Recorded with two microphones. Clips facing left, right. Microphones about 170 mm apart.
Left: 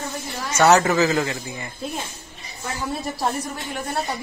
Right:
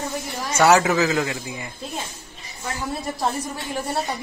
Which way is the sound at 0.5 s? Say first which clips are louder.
Even; 10° right (ahead or behind).